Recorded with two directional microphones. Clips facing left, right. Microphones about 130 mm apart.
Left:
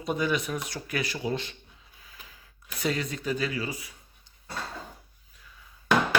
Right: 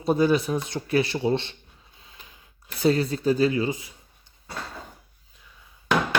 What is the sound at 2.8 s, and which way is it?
Speech, 30° right (ahead or behind).